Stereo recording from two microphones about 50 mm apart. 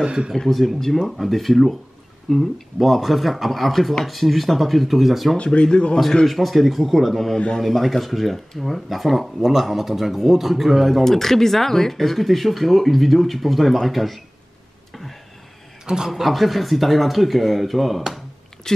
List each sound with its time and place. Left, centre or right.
0.0 s a man's voice: centre
0.3 s speech: centre
5.4 s speech: left
6.2 s speech: centre
7.3 s speech: centre
7.6 s speech: centre
14.9 s a sound: centre
15.8 s a man's voice: centre
16.1 s speech: centre
18.7 s speech: centre